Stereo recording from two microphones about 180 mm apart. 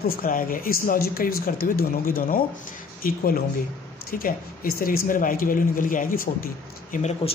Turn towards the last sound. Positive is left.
turn(degrees=40)  # may be behind; listen again after turning